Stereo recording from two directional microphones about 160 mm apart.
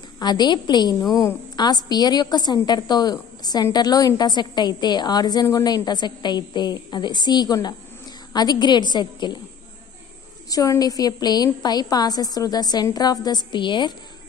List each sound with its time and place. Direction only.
0.2 s a woman's voice: 25° left (ahead or behind)
10.5 s a woman's voice: 20° left (ahead or behind)